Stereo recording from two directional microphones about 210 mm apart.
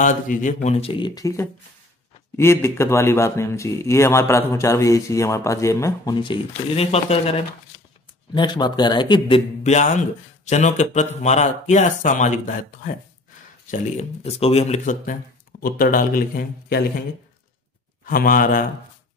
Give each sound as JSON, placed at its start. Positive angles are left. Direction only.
{"t": 0.0, "sound": "speech", "side_deg": 40}
{"t": 8.4, "sound": "speech", "side_deg": 20}
{"t": 13.7, "sound": "a man's voice", "side_deg": 35}
{"t": 18.0, "sound": "speech", "side_deg": 40}